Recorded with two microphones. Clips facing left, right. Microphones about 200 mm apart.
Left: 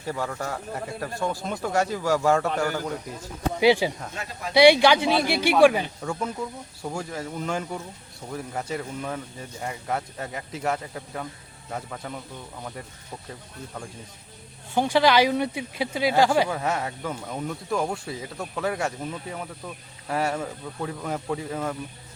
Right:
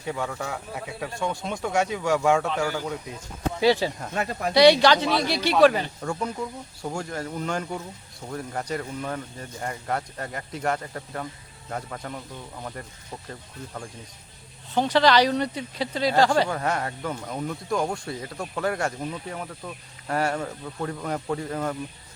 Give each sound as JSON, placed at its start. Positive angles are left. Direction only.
{"t": 0.0, "sound": "speech", "side_deg": 0}
{"t": 3.6, "sound": "speech", "side_deg": 15}
{"t": 4.1, "sound": "speech", "side_deg": -55}
{"t": 4.5, "sound": "speech", "side_deg": 10}
{"t": 14.7, "sound": "speech", "side_deg": 10}